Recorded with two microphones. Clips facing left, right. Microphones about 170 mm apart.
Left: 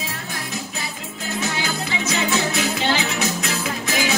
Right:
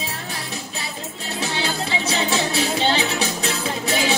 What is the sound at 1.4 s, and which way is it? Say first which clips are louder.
Music: right 2 dB; 30° right (ahead or behind).